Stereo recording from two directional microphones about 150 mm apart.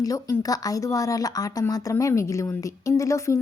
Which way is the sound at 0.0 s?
25° left (ahead or behind).